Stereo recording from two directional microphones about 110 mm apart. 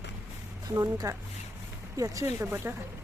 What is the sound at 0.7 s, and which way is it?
Speech, 30° right (ahead or behind).